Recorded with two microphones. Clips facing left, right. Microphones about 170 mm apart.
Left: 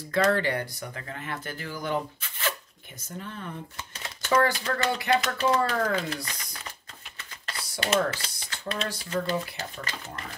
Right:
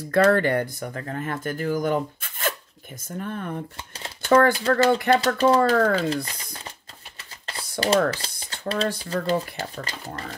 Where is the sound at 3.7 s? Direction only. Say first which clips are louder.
Right 2 dB; 30° right (ahead or behind).